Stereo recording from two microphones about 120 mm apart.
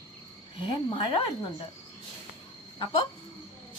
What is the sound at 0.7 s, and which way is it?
Speech, 45° left (ahead or behind).